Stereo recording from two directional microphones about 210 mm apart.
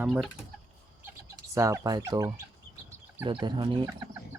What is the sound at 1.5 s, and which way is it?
Speech, 15° right (ahead or behind).